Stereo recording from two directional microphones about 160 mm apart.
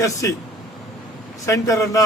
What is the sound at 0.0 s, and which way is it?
Speech, 20° left (ahead or behind).